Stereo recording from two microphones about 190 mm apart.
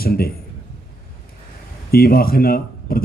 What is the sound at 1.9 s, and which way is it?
Speech, 50° left (ahead or behind).